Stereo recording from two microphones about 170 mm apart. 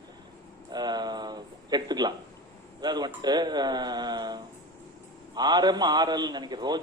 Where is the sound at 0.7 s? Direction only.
25° right (ahead or behind).